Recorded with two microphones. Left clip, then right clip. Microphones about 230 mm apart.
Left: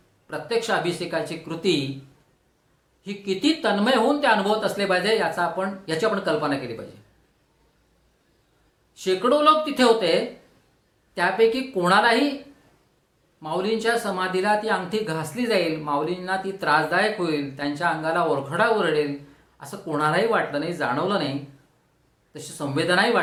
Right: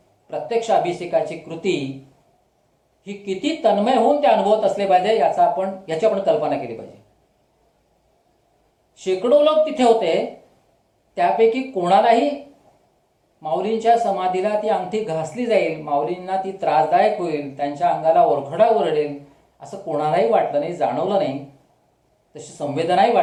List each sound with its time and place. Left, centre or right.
0.3 s speech: left
3.0 s speech: left
9.0 s speech: left
11.1 s speech: left
13.4 s speech: left